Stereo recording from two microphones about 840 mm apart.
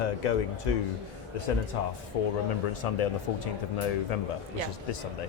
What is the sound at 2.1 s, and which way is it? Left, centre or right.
Speech, left.